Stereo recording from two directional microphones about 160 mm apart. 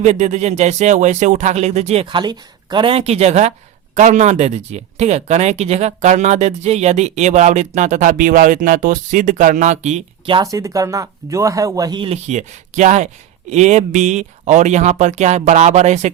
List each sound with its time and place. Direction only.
0.0 s speech: 45° right (ahead or behind)
10.2 s speech: 25° right (ahead or behind); by 16.1 s 45° right (ahead or behind)